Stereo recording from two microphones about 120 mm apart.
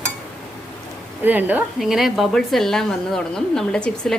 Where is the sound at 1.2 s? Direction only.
15° right (ahead or behind).